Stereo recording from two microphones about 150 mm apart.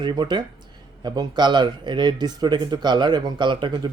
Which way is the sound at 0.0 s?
30° right (ahead or behind).